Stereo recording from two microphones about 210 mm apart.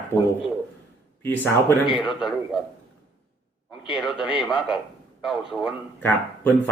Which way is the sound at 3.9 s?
5° right (ahead or behind).